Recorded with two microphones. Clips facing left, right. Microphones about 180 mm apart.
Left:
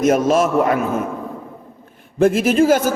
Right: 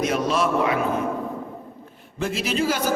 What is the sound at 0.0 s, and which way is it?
Speech, 45° left (ahead or behind).